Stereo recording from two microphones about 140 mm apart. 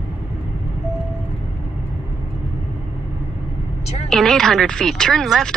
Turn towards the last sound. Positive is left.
turn(degrees=0)  # may be behind; listen again after turning